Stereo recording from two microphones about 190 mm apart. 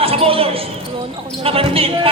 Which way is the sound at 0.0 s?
30° right (ahead or behind).